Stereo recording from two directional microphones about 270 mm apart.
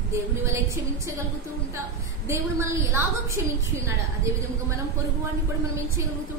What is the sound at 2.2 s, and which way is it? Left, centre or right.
A woman's voice, centre.